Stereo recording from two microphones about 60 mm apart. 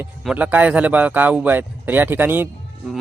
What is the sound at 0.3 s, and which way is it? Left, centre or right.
Speech, right.